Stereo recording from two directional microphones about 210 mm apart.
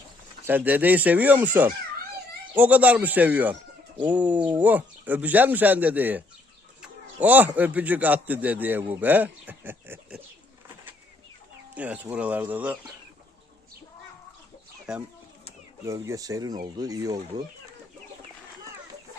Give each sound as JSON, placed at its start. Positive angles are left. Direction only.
{"t": 0.4, "sound": "speech", "side_deg": -10}
{"t": 11.7, "sound": "speech", "side_deg": -5}
{"t": 14.9, "sound": "speech", "side_deg": -5}
{"t": 15.8, "sound": "speech", "side_deg": -15}